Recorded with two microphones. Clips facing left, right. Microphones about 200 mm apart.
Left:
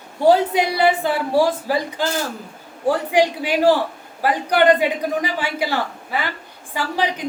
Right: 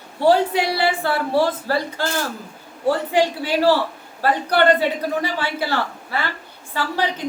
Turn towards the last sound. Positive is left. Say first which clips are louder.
# left 1 dB
turn(degrees=15)  # may be behind; listen again after turning